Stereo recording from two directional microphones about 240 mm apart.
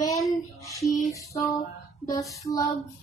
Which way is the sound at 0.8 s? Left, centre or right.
Centre.